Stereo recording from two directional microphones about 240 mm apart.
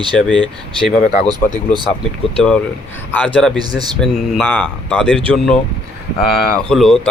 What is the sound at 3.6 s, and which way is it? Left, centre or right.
Speech, centre.